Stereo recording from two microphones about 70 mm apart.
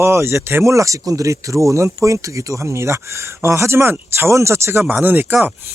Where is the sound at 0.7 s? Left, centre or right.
Right.